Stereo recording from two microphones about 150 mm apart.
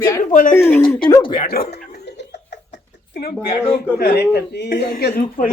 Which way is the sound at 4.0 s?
90° left.